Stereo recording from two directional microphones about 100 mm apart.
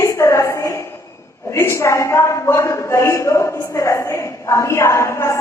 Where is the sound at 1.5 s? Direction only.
30° left (ahead or behind).